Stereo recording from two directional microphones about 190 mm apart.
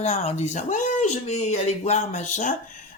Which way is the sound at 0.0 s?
35° left (ahead or behind).